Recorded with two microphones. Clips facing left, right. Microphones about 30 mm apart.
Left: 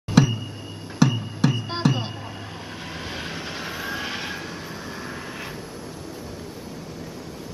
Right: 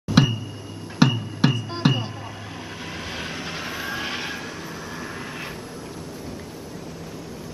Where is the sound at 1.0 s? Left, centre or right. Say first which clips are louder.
Right 1 dB; right.